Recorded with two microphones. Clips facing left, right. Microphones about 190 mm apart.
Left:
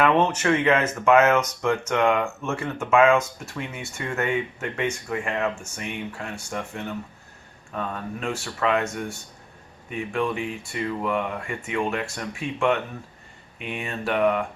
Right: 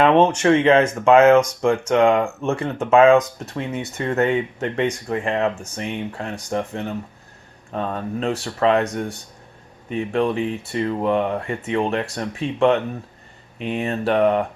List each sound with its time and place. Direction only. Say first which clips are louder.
0.0 s speech: right 5 dB; 30° right (ahead or behind)